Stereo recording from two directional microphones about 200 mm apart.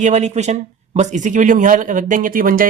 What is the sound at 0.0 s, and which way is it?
Speech, 35° right (ahead or behind).